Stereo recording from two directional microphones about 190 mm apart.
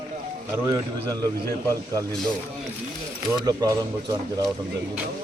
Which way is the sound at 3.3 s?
20° right (ahead or behind).